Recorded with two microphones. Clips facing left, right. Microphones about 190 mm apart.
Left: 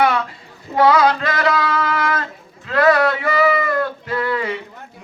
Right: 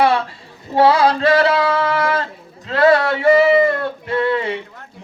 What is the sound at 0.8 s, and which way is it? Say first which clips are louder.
Male singing: right 1 dB; 30° right (ahead or behind).